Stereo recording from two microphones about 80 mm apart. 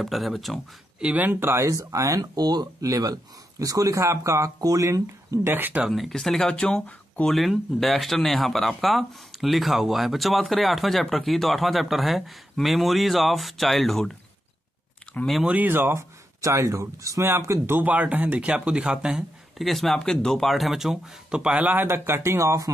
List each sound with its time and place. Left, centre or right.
0.0 s speech: centre
1.0 s speech: right
5.5 s speech: right
5.9 s speech: centre
7.3 s speech: centre
15.4 s speech: right
16.3 s speech: right
17.7 s speech: centre
19.6 s speech: centre; by 21.8 s right
21.8 s speech: right